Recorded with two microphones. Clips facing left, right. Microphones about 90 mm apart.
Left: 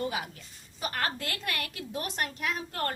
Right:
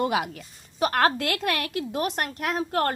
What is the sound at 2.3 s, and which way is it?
Speech, 45° right (ahead or behind).